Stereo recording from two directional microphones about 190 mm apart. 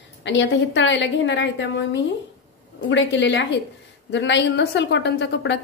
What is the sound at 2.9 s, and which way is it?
A woman's voice, 70° left (ahead or behind).